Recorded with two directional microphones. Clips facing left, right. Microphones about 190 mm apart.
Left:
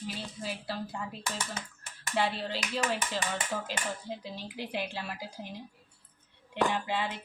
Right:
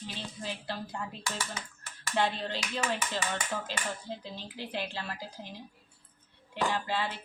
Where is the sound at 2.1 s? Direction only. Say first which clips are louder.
Even; 5° left (ahead or behind).